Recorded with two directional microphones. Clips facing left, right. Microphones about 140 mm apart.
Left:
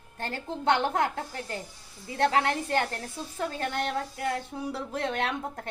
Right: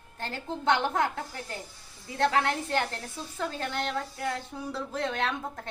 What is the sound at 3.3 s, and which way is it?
Speech, 20° left (ahead or behind).